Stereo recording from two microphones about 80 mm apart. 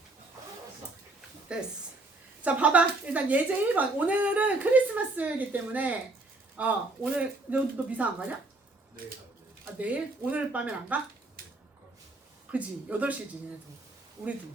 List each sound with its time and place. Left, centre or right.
1.5 s speech: centre
9.7 s speech: centre
12.5 s speech: centre
14.2 s speech: right